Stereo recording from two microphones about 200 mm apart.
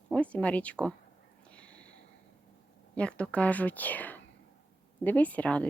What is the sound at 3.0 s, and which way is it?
Speech, 5° left (ahead or behind).